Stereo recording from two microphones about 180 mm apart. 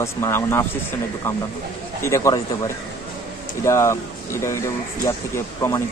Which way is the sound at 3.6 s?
15° left (ahead or behind).